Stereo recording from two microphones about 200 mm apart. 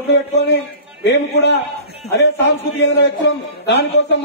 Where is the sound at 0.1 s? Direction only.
55° left (ahead or behind).